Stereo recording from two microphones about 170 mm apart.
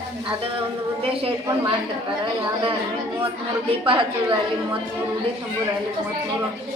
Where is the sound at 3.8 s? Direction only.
30° right (ahead or behind).